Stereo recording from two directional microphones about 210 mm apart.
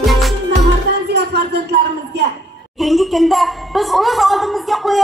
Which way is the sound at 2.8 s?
Centre (ahead or behind).